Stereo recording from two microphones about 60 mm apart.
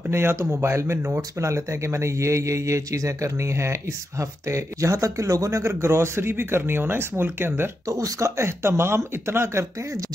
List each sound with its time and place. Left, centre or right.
0.1 s speech: right
7.9 s speech: right